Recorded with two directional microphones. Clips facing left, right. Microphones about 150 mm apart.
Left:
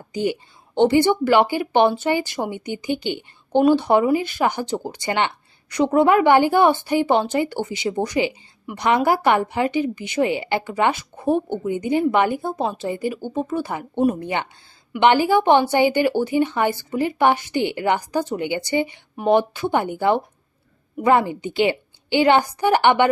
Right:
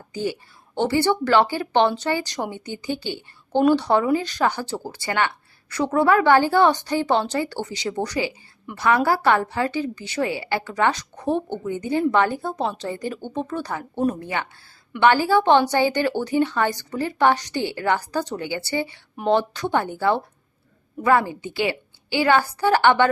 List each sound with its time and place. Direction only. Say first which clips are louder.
0.1 s a woman's voice: left 4 dB; 15° left (ahead or behind)